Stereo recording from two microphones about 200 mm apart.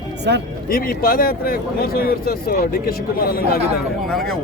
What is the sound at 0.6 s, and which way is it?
Speech, 45° left (ahead or behind).